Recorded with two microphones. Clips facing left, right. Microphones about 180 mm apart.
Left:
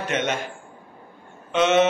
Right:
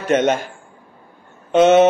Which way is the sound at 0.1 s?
40° right (ahead or behind).